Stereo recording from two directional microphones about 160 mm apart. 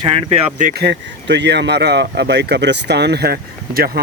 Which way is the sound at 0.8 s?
90° right.